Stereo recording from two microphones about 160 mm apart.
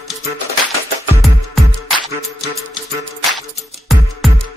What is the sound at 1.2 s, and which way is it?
Music, centre (ahead or behind).